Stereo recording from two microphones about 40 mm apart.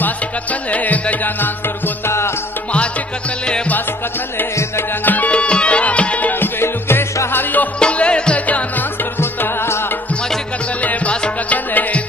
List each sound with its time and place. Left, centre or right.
0.0 s music: left
2.0 s music: left
5.0 s music: left
6.4 s music: left
7.8 s music: left
9.2 s music: left
10.8 s music: left